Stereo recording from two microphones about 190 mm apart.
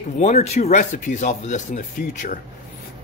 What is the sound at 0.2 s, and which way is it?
Speech, 35° left (ahead or behind).